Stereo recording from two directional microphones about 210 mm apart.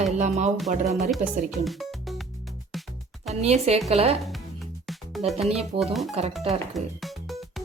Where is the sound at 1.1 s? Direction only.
Centre (ahead or behind).